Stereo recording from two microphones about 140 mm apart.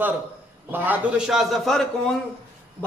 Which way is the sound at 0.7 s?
15° right (ahead or behind).